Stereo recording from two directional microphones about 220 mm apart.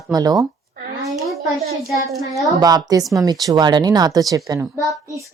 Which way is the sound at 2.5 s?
15° right (ahead or behind).